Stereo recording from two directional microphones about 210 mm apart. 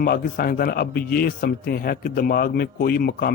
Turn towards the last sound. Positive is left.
turn(degrees=45)  # may be behind; listen again after turning